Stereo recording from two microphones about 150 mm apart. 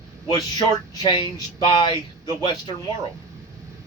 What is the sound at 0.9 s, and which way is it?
A man's voice, 30° left (ahead or behind).